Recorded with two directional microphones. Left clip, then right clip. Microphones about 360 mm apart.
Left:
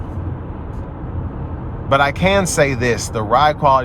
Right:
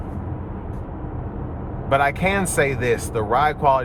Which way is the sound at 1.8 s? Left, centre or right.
Centre.